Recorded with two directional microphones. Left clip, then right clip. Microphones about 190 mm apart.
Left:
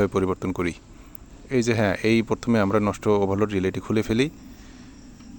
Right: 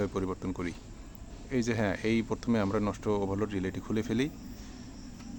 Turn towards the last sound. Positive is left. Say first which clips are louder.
# left 9 dB
turn(degrees=45)  # may be behind; listen again after turning